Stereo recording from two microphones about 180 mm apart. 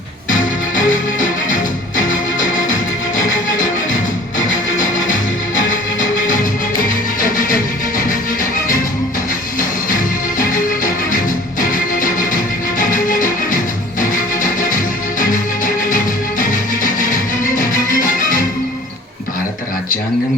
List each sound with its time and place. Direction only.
0.3 s music: 45° left (ahead or behind)
7.2 s music: 50° left (ahead or behind)
9.6 s music: 45° left (ahead or behind)